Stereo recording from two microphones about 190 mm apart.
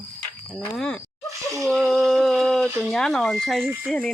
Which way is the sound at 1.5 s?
Centre (ahead or behind).